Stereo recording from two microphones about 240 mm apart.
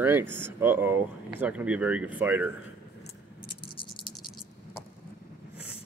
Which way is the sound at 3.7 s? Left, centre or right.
Centre.